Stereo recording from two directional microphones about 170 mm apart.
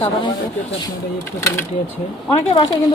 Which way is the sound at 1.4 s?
15° left (ahead or behind).